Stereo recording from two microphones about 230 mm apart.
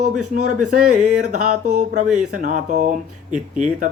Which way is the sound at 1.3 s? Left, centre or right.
Right.